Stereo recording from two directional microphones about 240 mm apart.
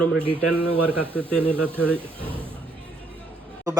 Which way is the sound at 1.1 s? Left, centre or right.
Centre.